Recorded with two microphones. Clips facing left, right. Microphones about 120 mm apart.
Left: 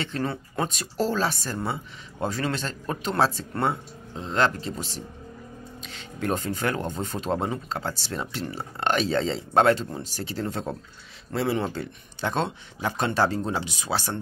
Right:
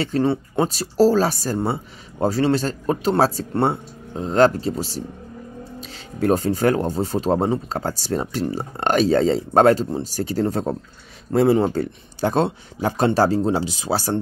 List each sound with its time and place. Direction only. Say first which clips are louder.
0.0 s speech: right 9 dB; 35° right (ahead or behind)